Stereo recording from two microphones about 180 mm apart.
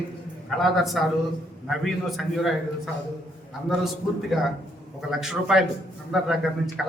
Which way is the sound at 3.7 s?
Centre (ahead or behind).